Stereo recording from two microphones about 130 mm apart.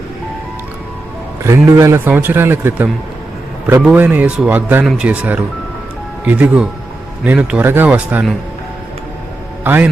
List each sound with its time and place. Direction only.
1.5 s a man's voice: 20° right (ahead or behind)
9.6 s a man's voice: 15° right (ahead or behind)